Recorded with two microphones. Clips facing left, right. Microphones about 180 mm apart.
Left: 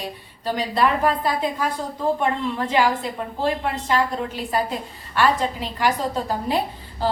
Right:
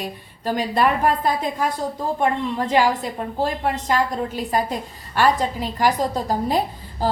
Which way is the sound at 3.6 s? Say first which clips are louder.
Right 1 dB; 40° right (ahead or behind).